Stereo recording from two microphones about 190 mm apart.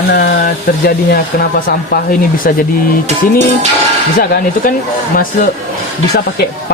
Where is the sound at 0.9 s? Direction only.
50° left (ahead or behind).